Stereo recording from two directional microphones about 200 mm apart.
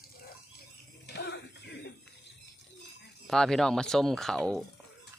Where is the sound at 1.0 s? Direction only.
55° left (ahead or behind).